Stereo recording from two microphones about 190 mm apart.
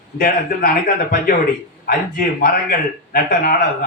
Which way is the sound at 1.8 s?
50° left (ahead or behind).